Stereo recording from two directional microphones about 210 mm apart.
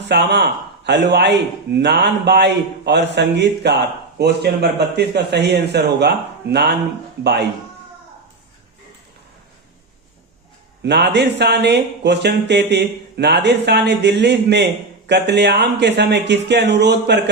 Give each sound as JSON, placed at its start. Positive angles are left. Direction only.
{"t": 0.1, "sound": "speech", "side_deg": -55}
{"t": 10.8, "sound": "speech", "side_deg": -55}